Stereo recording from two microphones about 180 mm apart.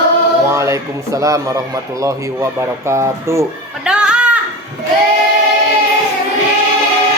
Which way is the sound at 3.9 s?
5° right (ahead or behind).